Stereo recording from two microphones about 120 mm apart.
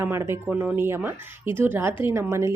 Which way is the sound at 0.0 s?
20° right (ahead or behind).